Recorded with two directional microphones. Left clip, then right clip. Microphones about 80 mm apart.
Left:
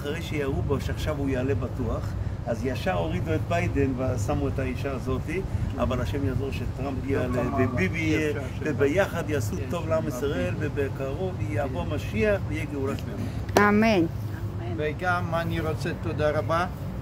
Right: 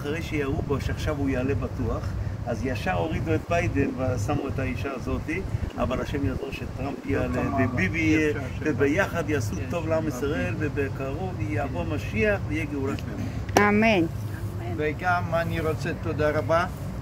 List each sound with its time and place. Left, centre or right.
0.0 s speech: centre
7.1 s speech: centre